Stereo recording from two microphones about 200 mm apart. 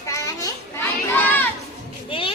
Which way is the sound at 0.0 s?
15° left (ahead or behind).